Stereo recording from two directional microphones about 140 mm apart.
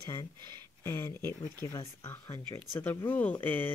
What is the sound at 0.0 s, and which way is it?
Speech, 20° left (ahead or behind).